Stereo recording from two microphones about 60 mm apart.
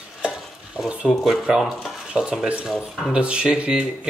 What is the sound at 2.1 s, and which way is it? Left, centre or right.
Speech, centre.